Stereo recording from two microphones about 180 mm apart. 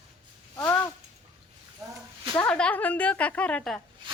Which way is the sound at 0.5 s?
15° left (ahead or behind).